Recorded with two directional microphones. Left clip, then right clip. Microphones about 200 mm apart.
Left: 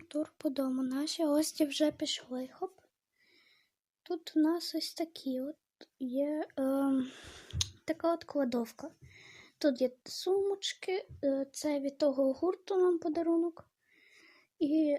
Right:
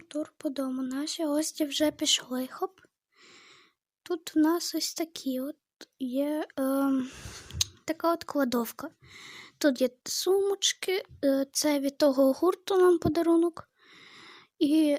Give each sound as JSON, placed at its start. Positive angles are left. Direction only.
{"t": 0.0, "sound": "a woman's voice", "side_deg": -10}
{"t": 2.0, "sound": "speech", "side_deg": -35}
{"t": 4.0, "sound": "speech", "side_deg": -30}